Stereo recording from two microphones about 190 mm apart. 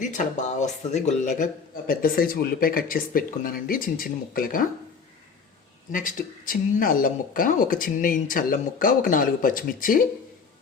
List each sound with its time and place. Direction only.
0.0 s speech: 40° left (ahead or behind)
5.9 s speech: 45° left (ahead or behind)